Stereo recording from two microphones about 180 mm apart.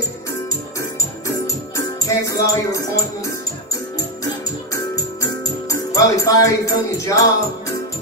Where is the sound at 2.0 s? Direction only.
15° left (ahead or behind).